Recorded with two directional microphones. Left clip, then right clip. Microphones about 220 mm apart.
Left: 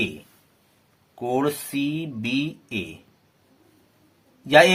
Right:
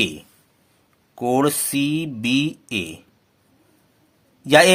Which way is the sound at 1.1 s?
45° right (ahead or behind).